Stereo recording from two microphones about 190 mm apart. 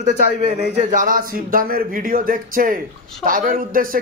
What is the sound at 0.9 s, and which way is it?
Speech, 45° right (ahead or behind).